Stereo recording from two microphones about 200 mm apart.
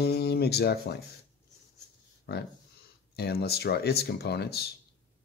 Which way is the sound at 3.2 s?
55° left (ahead or behind).